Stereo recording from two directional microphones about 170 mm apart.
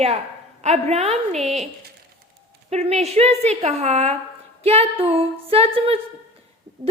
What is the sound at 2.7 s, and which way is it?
A woman's voice, 40° right (ahead or behind).